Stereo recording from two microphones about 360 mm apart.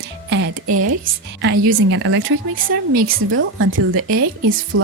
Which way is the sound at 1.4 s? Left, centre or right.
Right.